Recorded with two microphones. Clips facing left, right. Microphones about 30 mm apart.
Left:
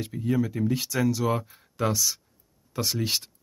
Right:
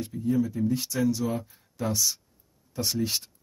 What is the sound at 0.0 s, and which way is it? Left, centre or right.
Speech, left.